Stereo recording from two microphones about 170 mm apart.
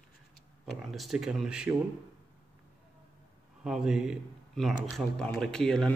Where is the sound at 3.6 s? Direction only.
5° right (ahead or behind).